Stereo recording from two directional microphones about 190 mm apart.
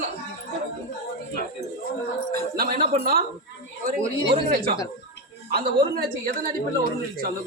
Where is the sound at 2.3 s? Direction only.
55° right (ahead or behind).